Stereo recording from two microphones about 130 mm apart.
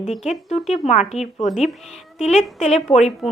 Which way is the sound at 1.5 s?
Centre (ahead or behind).